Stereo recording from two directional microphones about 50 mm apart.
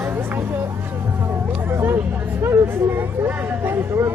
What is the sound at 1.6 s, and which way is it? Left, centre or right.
Hubbub, right.